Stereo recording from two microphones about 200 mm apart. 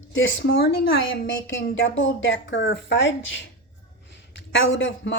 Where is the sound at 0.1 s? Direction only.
75° left (ahead or behind).